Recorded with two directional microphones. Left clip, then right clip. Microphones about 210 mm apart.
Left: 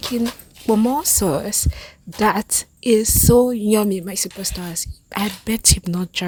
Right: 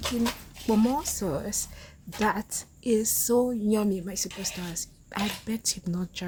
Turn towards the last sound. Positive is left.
turn(degrees=40)  # may be behind; listen again after turning